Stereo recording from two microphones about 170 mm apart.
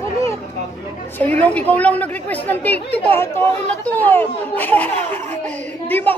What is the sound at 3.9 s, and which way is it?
A child's voice, 10° left (ahead or behind).